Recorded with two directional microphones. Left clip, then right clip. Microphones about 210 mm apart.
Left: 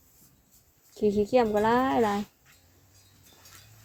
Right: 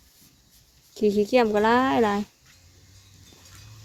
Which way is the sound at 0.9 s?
25° right (ahead or behind).